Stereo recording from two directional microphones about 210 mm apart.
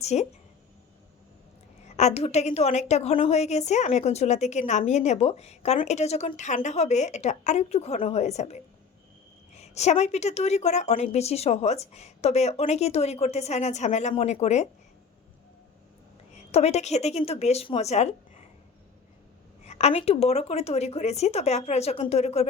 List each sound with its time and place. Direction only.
0.0 s a woman's voice: 30° left (ahead or behind)
2.0 s a woman's voice: 30° left (ahead or behind)
16.5 s a woman's voice: 30° left (ahead or behind)
19.6 s a woman's voice: 30° left (ahead or behind)